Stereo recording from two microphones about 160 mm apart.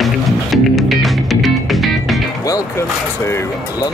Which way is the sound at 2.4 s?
20° left (ahead or behind).